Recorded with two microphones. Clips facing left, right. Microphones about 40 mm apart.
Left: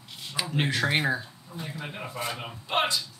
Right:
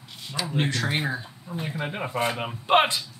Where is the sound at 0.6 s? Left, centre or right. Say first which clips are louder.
Left 1 dB; centre.